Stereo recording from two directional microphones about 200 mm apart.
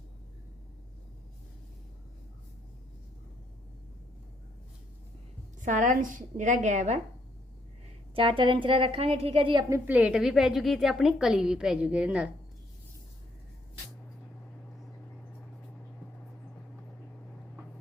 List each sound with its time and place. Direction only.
5.6 s a woman's voice: 40° right (ahead or behind)
8.1 s a woman's voice: 25° right (ahead or behind); by 12.3 s 5° right (ahead or behind)